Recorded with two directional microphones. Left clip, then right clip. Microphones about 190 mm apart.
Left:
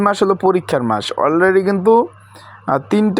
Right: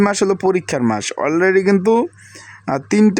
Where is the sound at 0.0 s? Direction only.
15° right (ahead or behind).